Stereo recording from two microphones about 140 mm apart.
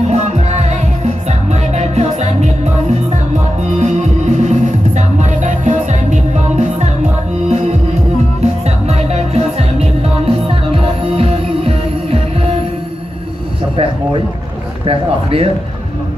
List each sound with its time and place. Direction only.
0.1 s music: 50° right (ahead or behind)
14.9 s a man's voice: 45° right (ahead or behind)